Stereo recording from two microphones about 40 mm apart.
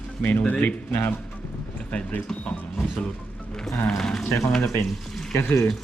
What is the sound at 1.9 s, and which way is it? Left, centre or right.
Speech, left.